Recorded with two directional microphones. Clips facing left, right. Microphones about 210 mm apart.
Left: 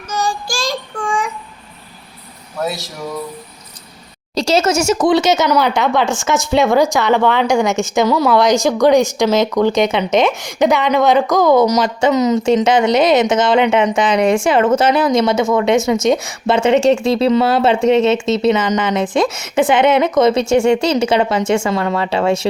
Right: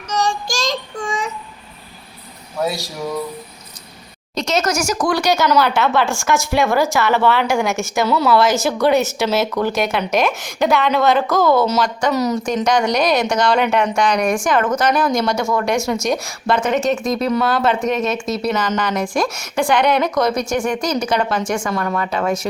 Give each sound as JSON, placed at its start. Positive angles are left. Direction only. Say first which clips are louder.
{"t": 0.1, "sound": "child singing", "louder": "even", "side_deg": 10}
{"t": 2.6, "sound": "a woman's voice", "louder": "even", "side_deg": 0}
{"t": 4.4, "sound": "a woman's voice", "louder": "left 5 dB", "side_deg": 30}
{"t": 9.1, "sound": "a woman's voice", "louder": "left 4 dB", "side_deg": -5}
{"t": 10.4, "sound": "a woman's voice", "louder": "left 3 dB", "side_deg": 15}